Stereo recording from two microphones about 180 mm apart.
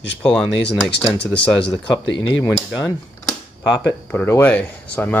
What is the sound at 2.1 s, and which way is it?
Speech, 90° left.